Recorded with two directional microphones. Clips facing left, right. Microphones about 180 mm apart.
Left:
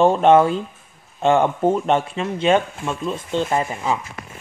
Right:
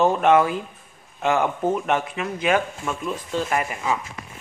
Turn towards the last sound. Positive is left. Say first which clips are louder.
# left 3 dB
turn(degrees=25)  # may be behind; listen again after turning